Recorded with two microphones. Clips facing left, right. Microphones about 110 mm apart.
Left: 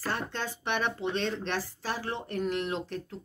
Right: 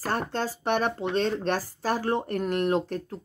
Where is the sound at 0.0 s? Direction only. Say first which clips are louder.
Right 5 dB; 45° right (ahead or behind).